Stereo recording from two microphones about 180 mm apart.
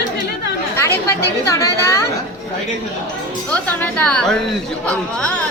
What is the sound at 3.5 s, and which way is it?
Speech, 10° left (ahead or behind).